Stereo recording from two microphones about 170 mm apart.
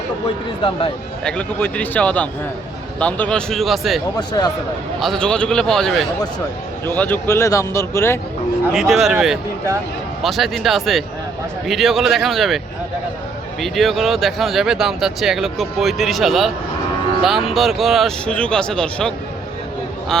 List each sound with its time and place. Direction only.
1.2 s speech: 5° left (ahead or behind)
4.2 s speech: 25° left (ahead or behind)
4.9 s speech: centre (ahead or behind)
8.7 s speech: centre (ahead or behind)
10.2 s speech: centre (ahead or behind)
13.6 s speech: centre (ahead or behind)